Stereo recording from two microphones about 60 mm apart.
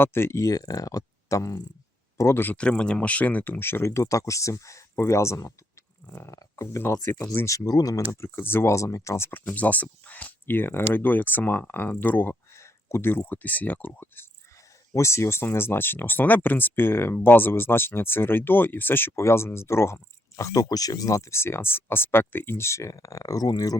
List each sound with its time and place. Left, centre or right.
0.0 s speech: left
0.3 s speech: left
2.3 s speech: left
2.6 s speech: centre; by 5.5 s left
6.7 s speech: left
7.4 s speech: left
8.2 s speech: left
8.7 s speech: left
9.3 s speech: left
12.5 s a sound: left
13.2 s speech: left
14.9 s speech: left
20.4 s speech: left